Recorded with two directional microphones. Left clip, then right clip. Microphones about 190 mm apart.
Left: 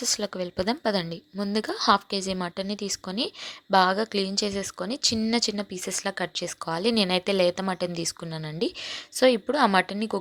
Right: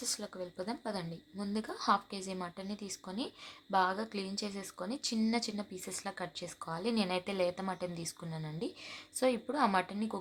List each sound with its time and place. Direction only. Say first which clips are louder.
0.0 s a woman's voice: left 12 dB; 35° left (ahead or behind)